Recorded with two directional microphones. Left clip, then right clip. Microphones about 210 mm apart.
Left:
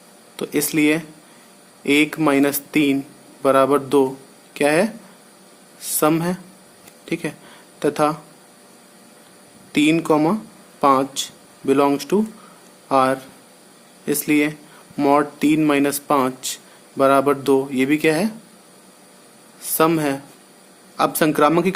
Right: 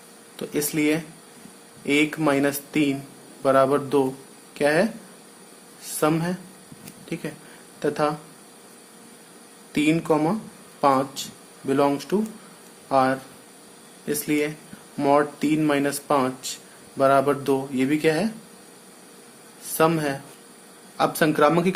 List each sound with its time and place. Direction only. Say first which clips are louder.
0.3 s speech: left 5 dB; 35° left (ahead or behind)
6.0 s speech: left 4 dB; 35° left (ahead or behind)
9.7 s speech: left 5 dB; 40° left (ahead or behind)
19.6 s speech: left 3 dB; 35° left (ahead or behind)